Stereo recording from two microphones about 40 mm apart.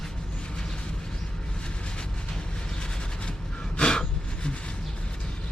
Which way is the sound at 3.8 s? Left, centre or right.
Left.